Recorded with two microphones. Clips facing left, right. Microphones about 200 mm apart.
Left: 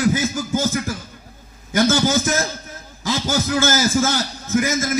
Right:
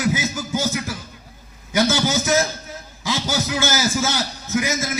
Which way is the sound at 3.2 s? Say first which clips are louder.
Left 4 dB; 50° left (ahead or behind).